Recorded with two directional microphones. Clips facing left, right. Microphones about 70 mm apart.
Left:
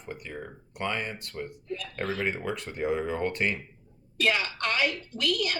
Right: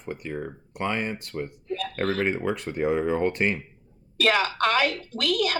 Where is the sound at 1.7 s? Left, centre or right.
Right.